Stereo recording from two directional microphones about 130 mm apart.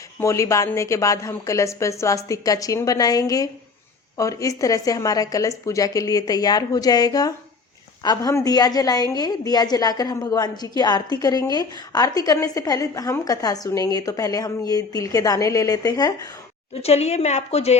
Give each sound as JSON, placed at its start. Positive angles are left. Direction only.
{"t": 0.2, "sound": "a woman's voice", "side_deg": 25}
{"t": 16.8, "sound": "a woman's voice", "side_deg": 55}